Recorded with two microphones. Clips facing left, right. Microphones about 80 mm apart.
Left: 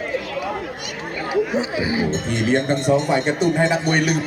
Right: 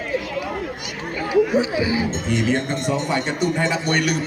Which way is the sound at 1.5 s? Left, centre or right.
Left.